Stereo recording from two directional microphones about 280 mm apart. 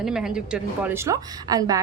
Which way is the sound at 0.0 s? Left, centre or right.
Centre.